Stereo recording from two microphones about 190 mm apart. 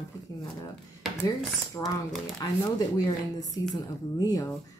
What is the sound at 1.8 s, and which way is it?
Speech, 15° left (ahead or behind).